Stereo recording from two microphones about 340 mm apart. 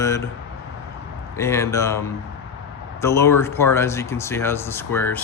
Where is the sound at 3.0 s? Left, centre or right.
Centre.